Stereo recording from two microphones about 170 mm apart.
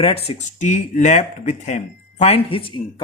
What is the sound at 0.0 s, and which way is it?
Speech, 35° left (ahead or behind).